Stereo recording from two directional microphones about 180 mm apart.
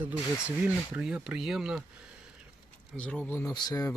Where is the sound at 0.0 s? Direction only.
10° right (ahead or behind).